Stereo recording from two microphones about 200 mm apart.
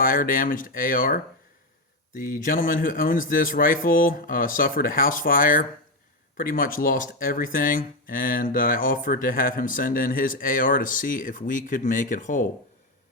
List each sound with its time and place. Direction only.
0.0 s speech: 45° left (ahead or behind)